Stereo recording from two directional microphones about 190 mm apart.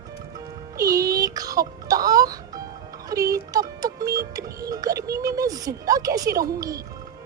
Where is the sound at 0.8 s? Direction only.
20° right (ahead or behind).